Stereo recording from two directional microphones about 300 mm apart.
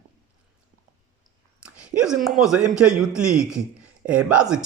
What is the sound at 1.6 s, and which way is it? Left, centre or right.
A man's voice, centre.